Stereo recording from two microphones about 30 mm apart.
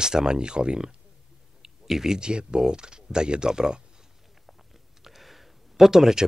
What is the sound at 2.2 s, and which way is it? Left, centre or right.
Speech, right.